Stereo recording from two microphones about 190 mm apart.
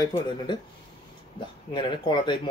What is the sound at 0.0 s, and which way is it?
Speech, 20° left (ahead or behind).